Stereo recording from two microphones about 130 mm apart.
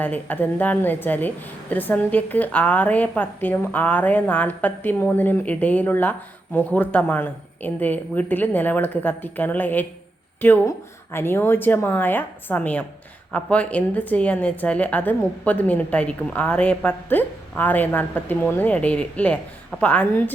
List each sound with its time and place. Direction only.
0.0 s a woman's voice: 15° left (ahead or behind)